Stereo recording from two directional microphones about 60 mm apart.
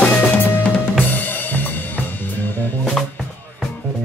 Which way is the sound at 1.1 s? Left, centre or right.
Left.